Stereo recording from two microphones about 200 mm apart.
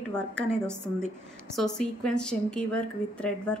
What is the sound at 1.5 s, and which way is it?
A woman's voice, 5° left (ahead or behind).